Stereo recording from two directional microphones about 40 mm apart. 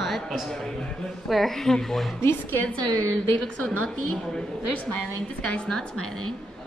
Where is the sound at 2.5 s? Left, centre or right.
Left.